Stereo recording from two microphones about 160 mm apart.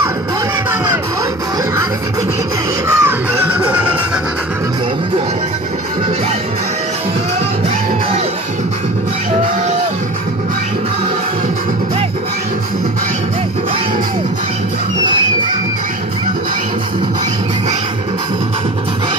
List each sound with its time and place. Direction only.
3.0 s music: 10° right (ahead or behind)